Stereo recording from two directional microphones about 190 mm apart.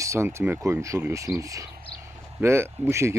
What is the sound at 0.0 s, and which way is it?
Speech, 15° right (ahead or behind).